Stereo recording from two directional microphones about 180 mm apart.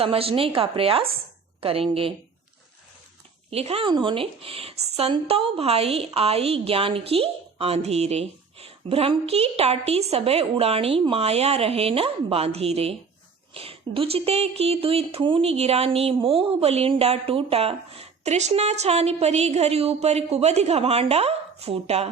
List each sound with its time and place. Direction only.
0.0 s a woman's voice: 30° right (ahead or behind)
3.5 s a woman's voice: 35° right (ahead or behind)